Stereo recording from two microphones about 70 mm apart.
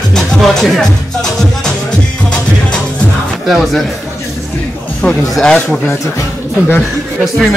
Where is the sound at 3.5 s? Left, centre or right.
Centre.